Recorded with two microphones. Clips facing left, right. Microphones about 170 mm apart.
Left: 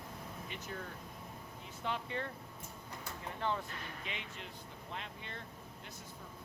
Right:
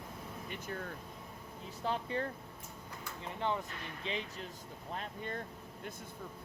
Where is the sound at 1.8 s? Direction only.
35° right (ahead or behind).